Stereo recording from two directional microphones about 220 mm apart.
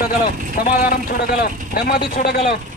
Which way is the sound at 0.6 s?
45° left (ahead or behind).